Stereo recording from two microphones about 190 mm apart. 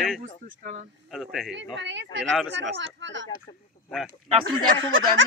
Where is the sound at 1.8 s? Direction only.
70° right (ahead or behind).